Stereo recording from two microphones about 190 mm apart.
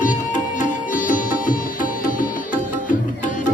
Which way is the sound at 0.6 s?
45° left (ahead or behind).